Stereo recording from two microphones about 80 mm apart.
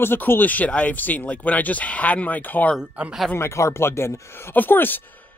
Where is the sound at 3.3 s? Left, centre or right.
Left.